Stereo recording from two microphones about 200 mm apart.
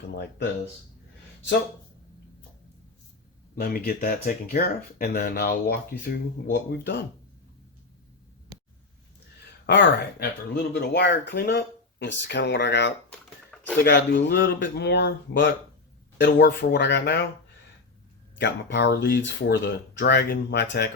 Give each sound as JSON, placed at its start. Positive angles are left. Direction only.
{"t": 0.1, "sound": "speech", "side_deg": 55}
{"t": 3.5, "sound": "speech", "side_deg": 45}
{"t": 9.6, "sound": "speech", "side_deg": 55}
{"t": 13.1, "sound": "a sound", "side_deg": 5}
{"t": 13.8, "sound": "speech", "side_deg": 60}
{"t": 18.3, "sound": "speech", "side_deg": 55}